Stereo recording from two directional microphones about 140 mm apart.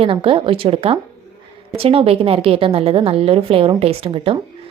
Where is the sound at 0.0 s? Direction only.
40° right (ahead or behind).